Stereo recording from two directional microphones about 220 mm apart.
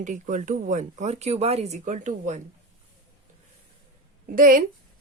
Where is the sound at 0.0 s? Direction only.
35° right (ahead or behind).